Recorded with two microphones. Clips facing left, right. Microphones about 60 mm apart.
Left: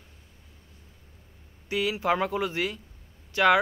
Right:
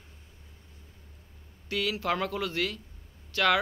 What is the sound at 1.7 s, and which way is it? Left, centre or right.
Speech, centre.